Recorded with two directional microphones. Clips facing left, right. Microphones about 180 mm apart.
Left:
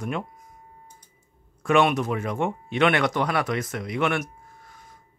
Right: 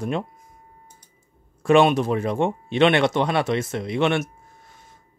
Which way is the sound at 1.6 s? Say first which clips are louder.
Right 4 dB; 30° right (ahead or behind).